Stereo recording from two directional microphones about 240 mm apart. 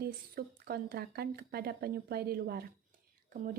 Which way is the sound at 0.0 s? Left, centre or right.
Right.